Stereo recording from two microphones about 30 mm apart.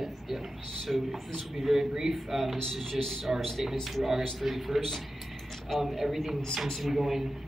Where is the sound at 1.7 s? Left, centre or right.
Centre.